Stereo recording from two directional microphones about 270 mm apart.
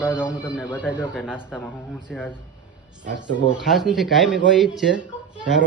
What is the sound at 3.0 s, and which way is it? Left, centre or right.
Speech, right.